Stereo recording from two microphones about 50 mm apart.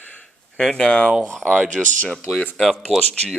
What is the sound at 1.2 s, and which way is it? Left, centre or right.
Speech, centre.